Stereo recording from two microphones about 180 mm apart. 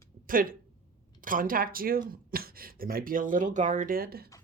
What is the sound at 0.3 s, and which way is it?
Speech, 50° right (ahead or behind).